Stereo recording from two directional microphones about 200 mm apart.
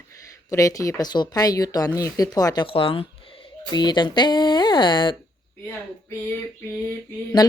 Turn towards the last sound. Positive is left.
turn(degrees=20)  # may be behind; listen again after turning